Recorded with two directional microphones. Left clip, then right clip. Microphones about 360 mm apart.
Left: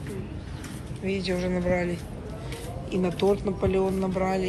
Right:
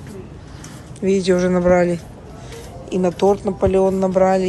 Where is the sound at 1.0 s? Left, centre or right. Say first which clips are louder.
Right 12 dB; right.